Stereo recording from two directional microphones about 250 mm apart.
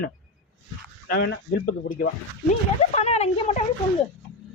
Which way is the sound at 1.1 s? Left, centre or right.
Left.